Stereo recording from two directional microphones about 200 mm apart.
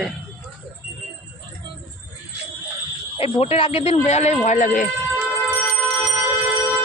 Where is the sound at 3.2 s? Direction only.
30° left (ahead or behind).